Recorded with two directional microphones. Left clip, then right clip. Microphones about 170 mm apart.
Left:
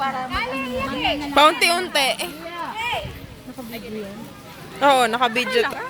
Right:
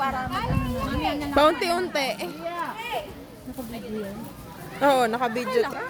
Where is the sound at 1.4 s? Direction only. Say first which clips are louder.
Left 5 dB; 10° right (ahead or behind).